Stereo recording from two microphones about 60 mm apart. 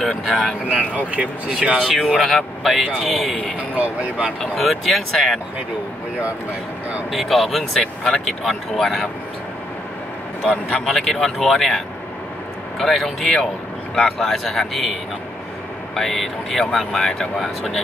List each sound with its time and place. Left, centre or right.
0.0 s speech: centre
1.1 s speech: centre
1.9 s speech: centre
3.5 s speech: right
4.4 s speech: centre
7.1 s speech: centre
7.8 s speech: centre
8.3 s speech: centre
10.5 s speech: centre
16.0 s speech: centre